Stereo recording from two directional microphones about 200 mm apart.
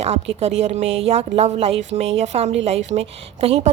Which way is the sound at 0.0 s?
30° right (ahead or behind).